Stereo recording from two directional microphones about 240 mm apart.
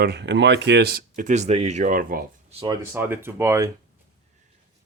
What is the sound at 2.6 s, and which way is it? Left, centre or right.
Speech, centre.